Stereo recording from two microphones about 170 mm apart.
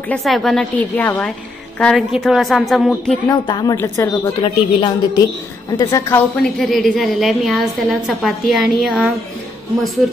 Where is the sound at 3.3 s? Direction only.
25° left (ahead or behind).